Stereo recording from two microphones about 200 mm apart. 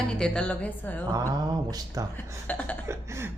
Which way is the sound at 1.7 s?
15° right (ahead or behind).